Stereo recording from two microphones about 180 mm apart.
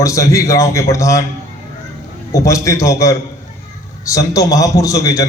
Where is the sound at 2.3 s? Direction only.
15° left (ahead or behind).